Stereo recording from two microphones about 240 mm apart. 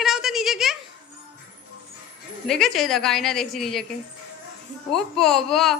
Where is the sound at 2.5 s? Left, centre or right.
Centre.